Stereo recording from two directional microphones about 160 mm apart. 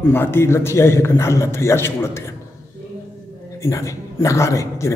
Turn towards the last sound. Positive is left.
turn(degrees=20)  # may be behind; listen again after turning